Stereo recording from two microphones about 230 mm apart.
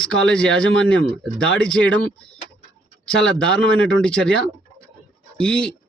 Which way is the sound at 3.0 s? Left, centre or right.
Centre.